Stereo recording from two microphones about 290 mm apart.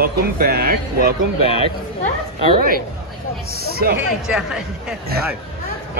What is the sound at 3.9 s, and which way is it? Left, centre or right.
Speech, centre.